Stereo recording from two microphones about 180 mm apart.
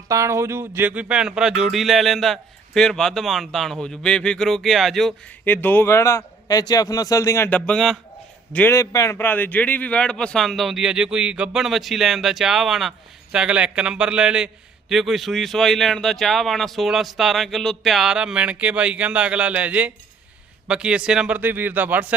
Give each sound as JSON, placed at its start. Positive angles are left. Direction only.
{"t": 0.1, "sound": "a man's voice", "side_deg": -15}
{"t": 5.5, "sound": "a man's voice", "side_deg": 10}
{"t": 8.5, "sound": "a man's voice", "side_deg": 15}